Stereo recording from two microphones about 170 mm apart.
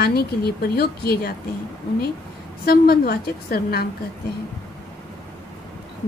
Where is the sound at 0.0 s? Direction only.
65° left (ahead or behind).